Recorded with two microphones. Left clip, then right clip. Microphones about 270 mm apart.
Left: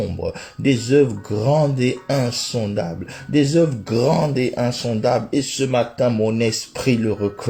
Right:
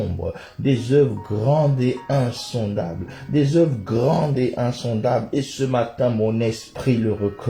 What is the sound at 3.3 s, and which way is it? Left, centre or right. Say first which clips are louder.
Speech: left 2 dB; left.